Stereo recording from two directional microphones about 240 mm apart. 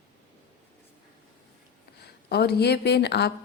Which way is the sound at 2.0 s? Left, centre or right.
Left.